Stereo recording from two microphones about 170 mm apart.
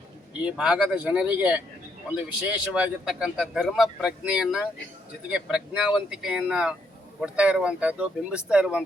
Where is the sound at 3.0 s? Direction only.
5° right (ahead or behind).